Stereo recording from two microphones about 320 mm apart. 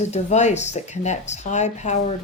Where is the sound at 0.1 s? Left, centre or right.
Left.